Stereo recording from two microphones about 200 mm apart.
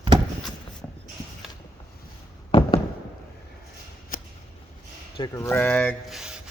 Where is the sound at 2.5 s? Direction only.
25° left (ahead or behind).